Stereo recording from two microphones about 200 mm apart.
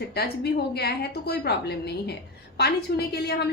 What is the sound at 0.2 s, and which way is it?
A woman's voice, 55° left (ahead or behind).